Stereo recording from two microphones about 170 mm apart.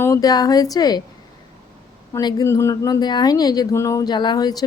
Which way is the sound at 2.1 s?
15° left (ahead or behind).